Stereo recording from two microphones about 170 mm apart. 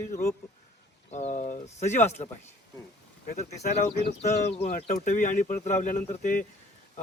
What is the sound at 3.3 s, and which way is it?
Speech, 60° left (ahead or behind).